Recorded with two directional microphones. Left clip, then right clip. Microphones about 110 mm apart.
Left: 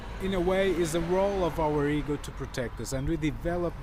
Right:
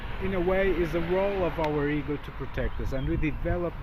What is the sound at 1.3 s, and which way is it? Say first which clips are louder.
Speech: even; 10° left (ahead or behind).